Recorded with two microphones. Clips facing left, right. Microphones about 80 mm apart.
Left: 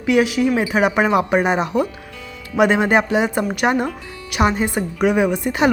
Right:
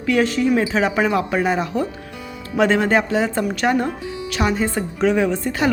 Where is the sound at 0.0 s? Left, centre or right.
Centre.